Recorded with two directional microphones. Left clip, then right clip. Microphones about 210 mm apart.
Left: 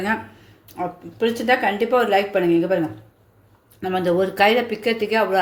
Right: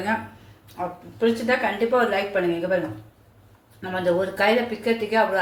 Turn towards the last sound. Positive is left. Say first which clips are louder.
# left 2 dB
turn(degrees=45)  # may be behind; listen again after turning